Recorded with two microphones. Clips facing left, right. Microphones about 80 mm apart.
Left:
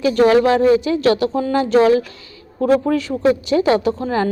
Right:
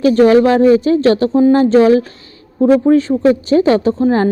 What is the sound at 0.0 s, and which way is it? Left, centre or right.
Speech, right.